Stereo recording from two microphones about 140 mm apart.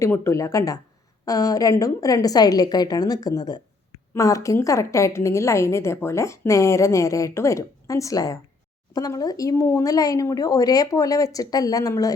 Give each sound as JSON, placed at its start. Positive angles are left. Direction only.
{"t": 0.0, "sound": "a woman's voice", "side_deg": 20}